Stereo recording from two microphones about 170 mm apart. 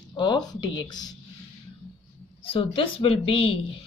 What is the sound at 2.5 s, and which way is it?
Speech, 35° left (ahead or behind).